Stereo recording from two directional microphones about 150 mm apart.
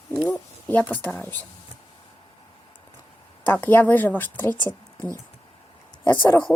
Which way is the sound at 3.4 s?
15° left (ahead or behind).